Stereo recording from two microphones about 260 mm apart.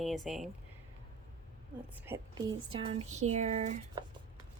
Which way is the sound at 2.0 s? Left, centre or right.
Centre.